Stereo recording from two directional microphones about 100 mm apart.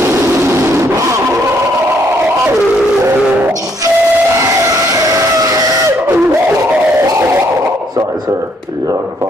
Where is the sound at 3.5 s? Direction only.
35° right (ahead or behind).